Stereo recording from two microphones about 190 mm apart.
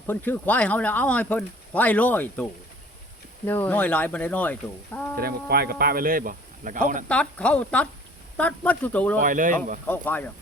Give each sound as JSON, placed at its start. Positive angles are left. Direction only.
{"t": 0.1, "sound": "speech", "side_deg": 10}
{"t": 5.1, "sound": "speech", "side_deg": -55}
{"t": 7.1, "sound": "speech", "side_deg": 5}
{"t": 9.2, "sound": "speech", "side_deg": -45}
{"t": 9.8, "sound": "speech", "side_deg": 10}